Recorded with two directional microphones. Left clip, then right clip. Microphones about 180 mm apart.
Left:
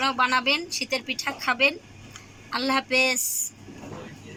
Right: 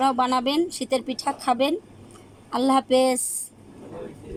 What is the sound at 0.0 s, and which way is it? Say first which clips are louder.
A woman's voice: right 1 dB; 35° right (ahead or behind).